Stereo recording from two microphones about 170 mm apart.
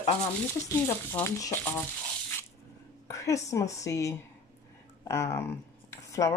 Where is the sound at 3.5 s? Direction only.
20° left (ahead or behind).